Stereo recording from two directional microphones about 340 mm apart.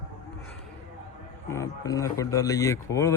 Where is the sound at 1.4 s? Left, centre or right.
Centre.